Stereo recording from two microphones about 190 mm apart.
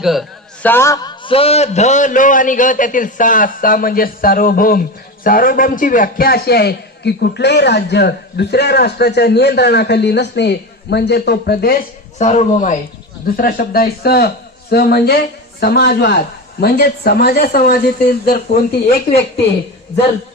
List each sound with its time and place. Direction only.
0.0 s a sound: centre (ahead or behind)
0.7 s a man's voice: 15° left (ahead or behind); by 11.8 s 55° left (ahead or behind)
12.2 s a man's voice: 35° left (ahead or behind); by 18.6 s 55° left (ahead or behind)